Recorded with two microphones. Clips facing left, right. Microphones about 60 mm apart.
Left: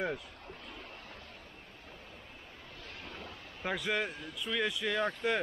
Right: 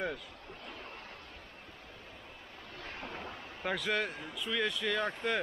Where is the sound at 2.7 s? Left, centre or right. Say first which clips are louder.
Right 6 dB; right.